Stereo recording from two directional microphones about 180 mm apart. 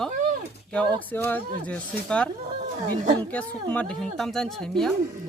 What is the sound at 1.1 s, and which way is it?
Speech, 10° left (ahead or behind).